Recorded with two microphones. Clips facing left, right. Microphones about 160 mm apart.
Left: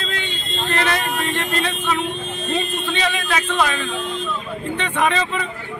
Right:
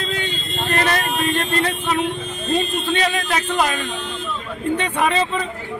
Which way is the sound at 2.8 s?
45° right (ahead or behind).